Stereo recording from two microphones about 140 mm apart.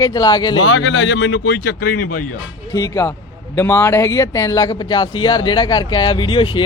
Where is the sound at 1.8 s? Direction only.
90° left.